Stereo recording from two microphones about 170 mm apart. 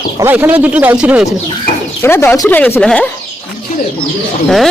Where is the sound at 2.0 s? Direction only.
15° left (ahead or behind).